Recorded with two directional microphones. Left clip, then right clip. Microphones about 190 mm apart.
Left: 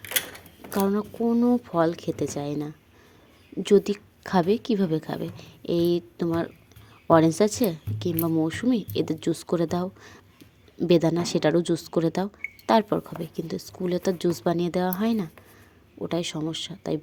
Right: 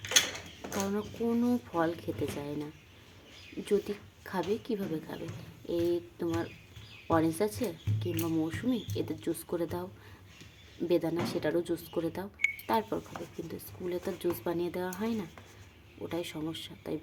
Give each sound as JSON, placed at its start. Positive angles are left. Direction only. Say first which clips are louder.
{"t": 0.8, "sound": "a woman's voice", "louder": "left 9 dB", "side_deg": 25}